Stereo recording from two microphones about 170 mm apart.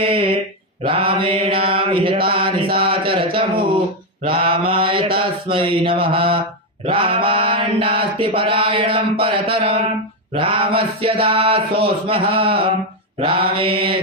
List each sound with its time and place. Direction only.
0.0 s mantra: 30° right (ahead or behind)
2.7 s speech: 30° right (ahead or behind)
4.2 s mantra: 30° right (ahead or behind)